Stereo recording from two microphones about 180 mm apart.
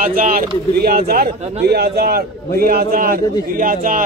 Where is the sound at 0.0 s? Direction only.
50° right (ahead or behind).